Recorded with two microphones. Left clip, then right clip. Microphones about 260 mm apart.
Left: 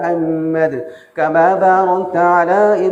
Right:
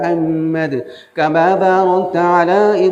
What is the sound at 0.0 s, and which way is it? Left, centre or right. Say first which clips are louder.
Music: even; right.